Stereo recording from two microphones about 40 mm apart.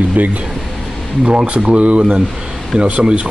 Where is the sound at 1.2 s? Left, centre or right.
Right.